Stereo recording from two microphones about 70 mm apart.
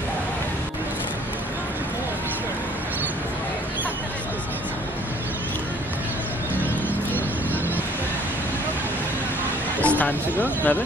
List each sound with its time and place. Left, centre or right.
9.8 s music: left